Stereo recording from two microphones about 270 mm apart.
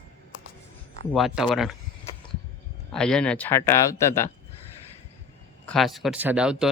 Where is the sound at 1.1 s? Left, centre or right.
Centre.